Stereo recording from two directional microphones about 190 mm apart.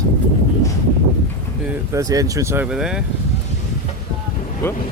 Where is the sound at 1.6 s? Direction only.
15° right (ahead or behind).